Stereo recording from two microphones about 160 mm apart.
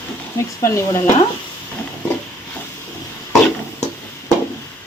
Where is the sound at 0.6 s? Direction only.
15° left (ahead or behind).